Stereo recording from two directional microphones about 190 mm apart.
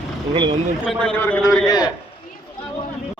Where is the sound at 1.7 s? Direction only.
20° left (ahead or behind).